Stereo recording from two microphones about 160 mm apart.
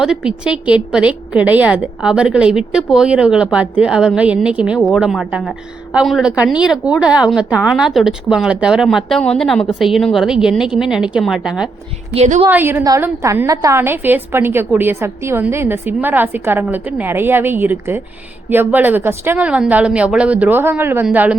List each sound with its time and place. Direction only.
0.0 s a woman's voice: 5° right (ahead or behind)
12.1 s a woman's voice: 40° right (ahead or behind)
12.5 s a woman's voice: 10° right (ahead or behind)